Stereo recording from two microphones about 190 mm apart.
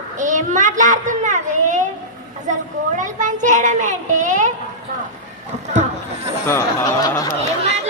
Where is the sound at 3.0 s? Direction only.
40° right (ahead or behind).